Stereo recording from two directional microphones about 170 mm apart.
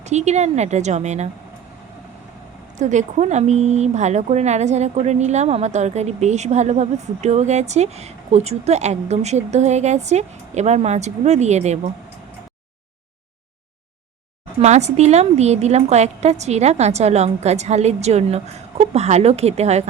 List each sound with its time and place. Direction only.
0.0 s a woman's voice: 40° right (ahead or behind)
2.7 s speech: 45° right (ahead or behind)
14.6 s speech: 40° right (ahead or behind)